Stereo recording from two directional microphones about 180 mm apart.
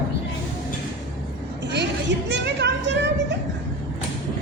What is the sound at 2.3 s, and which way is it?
A child's voice, 75° right (ahead or behind).